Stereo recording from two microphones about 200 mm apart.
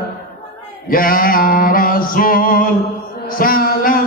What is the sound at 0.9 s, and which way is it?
Mantra, 45° left (ahead or behind).